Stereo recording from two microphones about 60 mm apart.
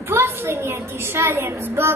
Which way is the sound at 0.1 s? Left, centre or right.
Right.